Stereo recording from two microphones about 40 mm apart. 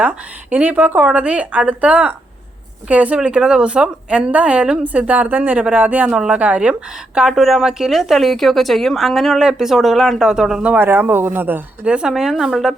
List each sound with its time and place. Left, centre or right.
0.0 s speech: right
3.2 s speech: right
4.3 s speech: right
6.1 s speech: centre
6.4 s speech: right
7.3 s speech: centre
10.2 s speech: centre
10.8 s speech: right
11.9 s speech: right
12.1 s speech: centre